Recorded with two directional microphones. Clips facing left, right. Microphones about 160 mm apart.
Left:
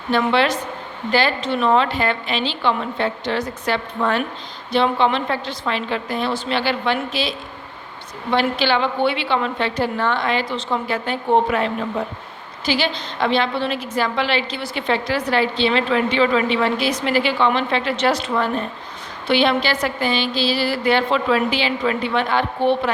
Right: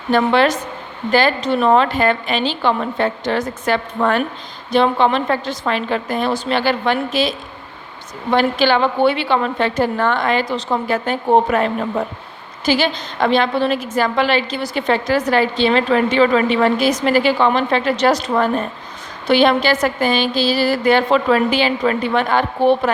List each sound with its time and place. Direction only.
0.1 s a woman's voice: 45° right (ahead or behind)